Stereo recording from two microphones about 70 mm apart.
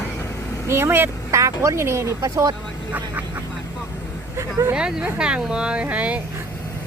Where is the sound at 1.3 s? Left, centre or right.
Right.